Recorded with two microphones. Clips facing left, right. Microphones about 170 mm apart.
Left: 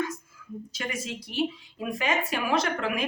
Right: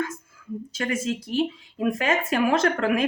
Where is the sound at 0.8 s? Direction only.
50° right (ahead or behind).